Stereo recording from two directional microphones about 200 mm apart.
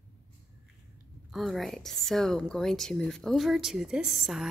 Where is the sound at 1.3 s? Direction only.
Centre (ahead or behind).